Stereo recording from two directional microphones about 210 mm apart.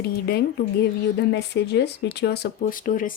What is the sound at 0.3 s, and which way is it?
Speech, 50° left (ahead or behind).